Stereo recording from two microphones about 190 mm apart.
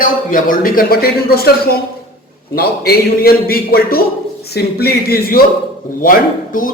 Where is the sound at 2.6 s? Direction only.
55° left (ahead or behind).